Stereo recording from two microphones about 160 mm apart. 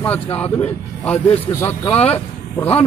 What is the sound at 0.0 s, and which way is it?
A man's voice, 10° left (ahead or behind).